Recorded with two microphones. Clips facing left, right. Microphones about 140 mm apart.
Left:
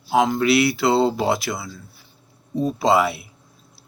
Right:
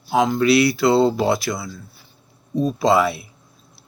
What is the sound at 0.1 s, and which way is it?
Speech, 15° left (ahead or behind).